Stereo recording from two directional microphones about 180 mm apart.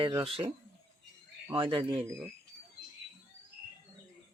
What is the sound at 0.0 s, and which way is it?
Speech, 25° right (ahead or behind).